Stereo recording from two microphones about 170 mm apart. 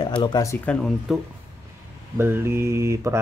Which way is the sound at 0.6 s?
Centre (ahead or behind).